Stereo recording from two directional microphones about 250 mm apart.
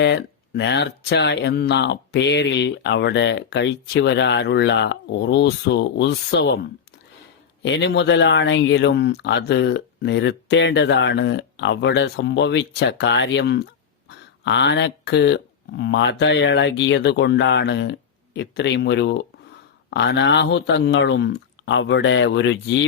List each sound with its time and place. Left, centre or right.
0.0 s speech: left